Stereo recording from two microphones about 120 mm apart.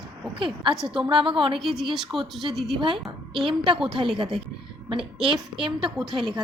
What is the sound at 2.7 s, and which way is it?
Speech, 45° right (ahead or behind).